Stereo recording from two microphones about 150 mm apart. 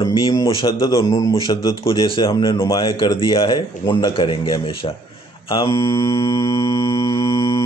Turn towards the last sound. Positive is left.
turn(degrees=20)  # may be behind; listen again after turning